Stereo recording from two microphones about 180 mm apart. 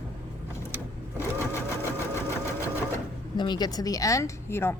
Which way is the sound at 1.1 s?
15° left (ahead or behind).